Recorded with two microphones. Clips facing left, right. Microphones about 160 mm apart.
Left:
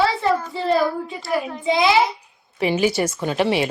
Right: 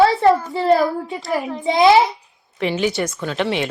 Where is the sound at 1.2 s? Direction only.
Centre (ahead or behind).